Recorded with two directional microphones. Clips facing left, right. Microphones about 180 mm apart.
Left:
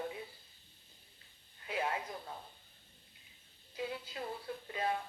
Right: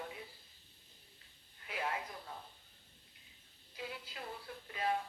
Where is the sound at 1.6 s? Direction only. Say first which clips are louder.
Left 4 dB; 25° left (ahead or behind).